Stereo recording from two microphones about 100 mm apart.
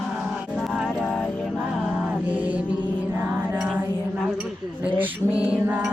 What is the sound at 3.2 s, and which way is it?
Music, 20° right (ahead or behind).